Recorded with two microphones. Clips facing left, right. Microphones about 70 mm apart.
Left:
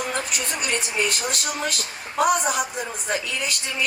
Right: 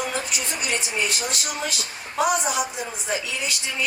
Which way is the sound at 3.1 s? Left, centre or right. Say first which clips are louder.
Left 1 dB; left.